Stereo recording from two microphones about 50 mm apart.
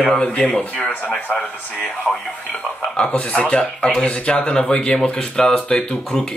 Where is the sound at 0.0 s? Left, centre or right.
Left.